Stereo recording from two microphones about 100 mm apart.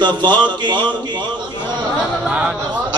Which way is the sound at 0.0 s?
50° right (ahead or behind).